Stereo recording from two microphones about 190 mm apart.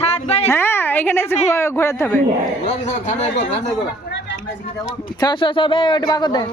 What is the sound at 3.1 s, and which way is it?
Speech, 35° left (ahead or behind).